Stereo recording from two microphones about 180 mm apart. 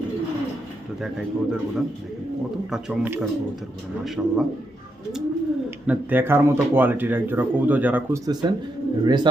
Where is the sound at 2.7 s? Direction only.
10° right (ahead or behind).